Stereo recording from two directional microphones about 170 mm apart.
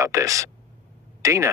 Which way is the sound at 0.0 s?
20° right (ahead or behind).